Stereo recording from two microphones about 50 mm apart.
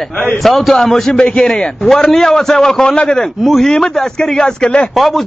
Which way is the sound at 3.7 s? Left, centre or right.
Centre.